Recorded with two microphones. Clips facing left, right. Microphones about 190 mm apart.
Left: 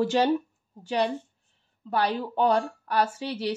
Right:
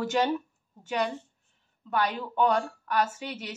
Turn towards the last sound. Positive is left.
turn(degrees=35)  # may be behind; listen again after turning